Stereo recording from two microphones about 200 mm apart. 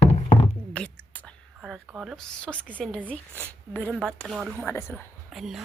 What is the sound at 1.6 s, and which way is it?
Speech, 5° right (ahead or behind).